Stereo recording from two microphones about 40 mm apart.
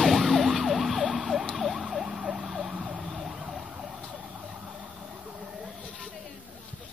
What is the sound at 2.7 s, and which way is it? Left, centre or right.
Emergency vehicle, centre.